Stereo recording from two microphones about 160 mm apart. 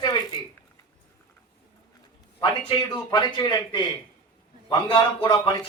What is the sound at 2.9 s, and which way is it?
A man's voice, 25° left (ahead or behind).